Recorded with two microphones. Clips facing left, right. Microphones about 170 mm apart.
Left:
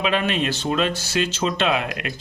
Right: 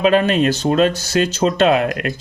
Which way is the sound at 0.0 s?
40° right (ahead or behind).